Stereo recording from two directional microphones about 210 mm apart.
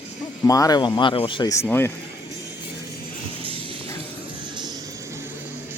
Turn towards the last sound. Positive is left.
turn(degrees=-20)  # may be behind; listen again after turning